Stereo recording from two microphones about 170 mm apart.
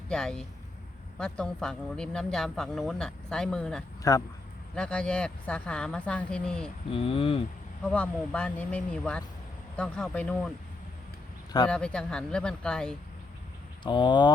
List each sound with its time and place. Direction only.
0.1 s speech: 5° left (ahead or behind)
4.0 s speech: 20° left (ahead or behind)
4.7 s speech: 5° left (ahead or behind)
6.9 s speech: 30° left (ahead or behind)
7.9 s speech: 5° left (ahead or behind)
11.7 s speech: 5° left (ahead or behind)
13.8 s speech: 25° left (ahead or behind)